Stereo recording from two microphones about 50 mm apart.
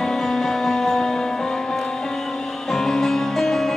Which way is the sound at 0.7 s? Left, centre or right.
Centre.